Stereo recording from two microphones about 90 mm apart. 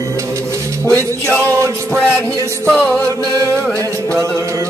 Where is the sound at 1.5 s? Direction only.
30° right (ahead or behind).